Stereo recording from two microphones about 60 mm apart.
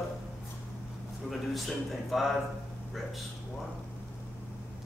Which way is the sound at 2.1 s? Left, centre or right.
Centre.